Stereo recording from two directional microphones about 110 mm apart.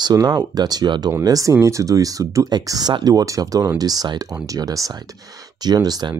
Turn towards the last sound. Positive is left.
turn(degrees=-35)  # may be behind; listen again after turning